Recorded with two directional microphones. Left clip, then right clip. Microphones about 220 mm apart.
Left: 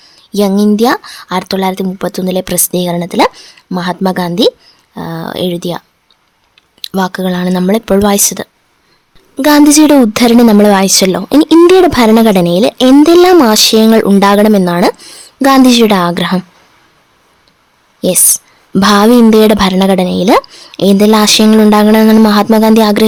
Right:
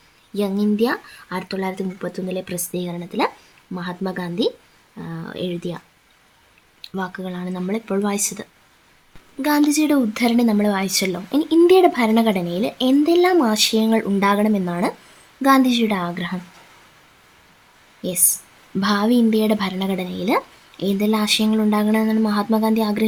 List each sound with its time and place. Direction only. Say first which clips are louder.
0.3 s a woman's voice: left 11 dB; 50° left (ahead or behind)
6.9 s a woman's voice: left 14 dB; 45° left (ahead or behind)
18.0 s a woman's voice: left 13 dB; 45° left (ahead or behind)